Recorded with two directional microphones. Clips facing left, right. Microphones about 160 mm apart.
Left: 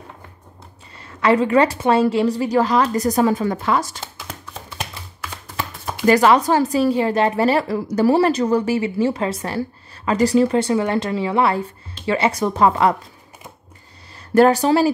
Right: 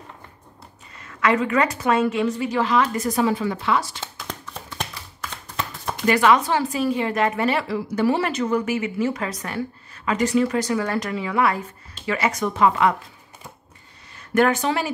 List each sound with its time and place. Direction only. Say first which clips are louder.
0.9 s speech: left 4 dB; 30° left (ahead or behind)
4.3 s a sound: even; 5° left (ahead or behind)
6.0 s speech: left 4 dB; 35° left (ahead or behind)
14.3 s speech: left 6 dB; 35° left (ahead or behind)